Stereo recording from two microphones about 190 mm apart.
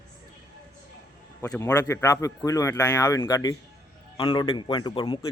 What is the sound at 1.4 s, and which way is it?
A man's voice, 15° left (ahead or behind).